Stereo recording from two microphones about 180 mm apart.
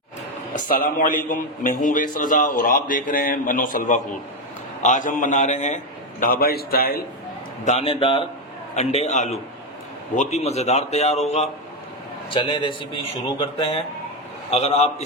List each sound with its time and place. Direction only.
0.5 s speech: 50° left (ahead or behind)
7.6 s a man's voice: 40° left (ahead or behind)